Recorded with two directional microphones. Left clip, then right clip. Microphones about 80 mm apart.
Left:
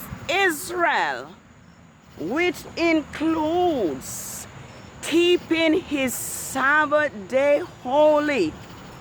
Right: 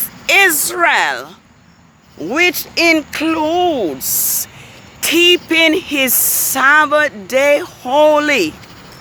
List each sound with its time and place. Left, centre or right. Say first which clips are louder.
0.3 s speech: right 11 dB; right
2.3 s speech: right 10 dB; right